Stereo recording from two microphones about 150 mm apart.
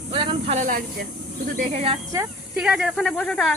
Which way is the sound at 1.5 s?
50° right (ahead or behind).